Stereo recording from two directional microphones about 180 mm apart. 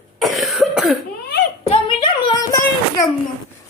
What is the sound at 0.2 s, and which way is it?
Cough, centre (ahead or behind).